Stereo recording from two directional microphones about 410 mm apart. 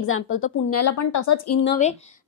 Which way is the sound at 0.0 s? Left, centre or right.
Left.